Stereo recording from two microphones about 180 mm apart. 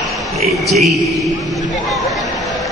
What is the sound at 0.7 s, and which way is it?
Speech, centre (ahead or behind).